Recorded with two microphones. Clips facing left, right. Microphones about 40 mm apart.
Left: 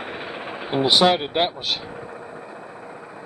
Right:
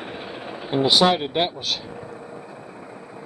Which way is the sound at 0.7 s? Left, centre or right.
Centre.